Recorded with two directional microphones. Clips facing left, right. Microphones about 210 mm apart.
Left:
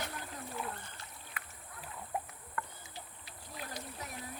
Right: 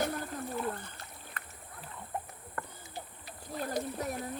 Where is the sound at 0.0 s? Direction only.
45° right (ahead or behind).